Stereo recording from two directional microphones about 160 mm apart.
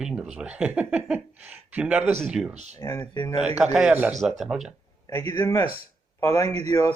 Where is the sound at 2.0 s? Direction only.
40° right (ahead or behind).